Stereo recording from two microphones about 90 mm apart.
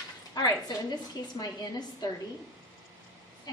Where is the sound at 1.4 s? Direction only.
45° left (ahead or behind).